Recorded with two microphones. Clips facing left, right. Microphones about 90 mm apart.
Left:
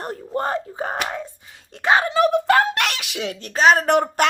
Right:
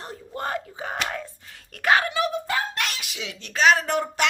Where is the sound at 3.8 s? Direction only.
55° left (ahead or behind).